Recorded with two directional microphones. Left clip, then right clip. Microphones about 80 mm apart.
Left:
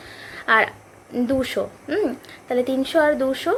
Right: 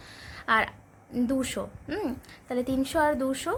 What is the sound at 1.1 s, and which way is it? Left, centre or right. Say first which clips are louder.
A woman's voice: left 7 dB; right.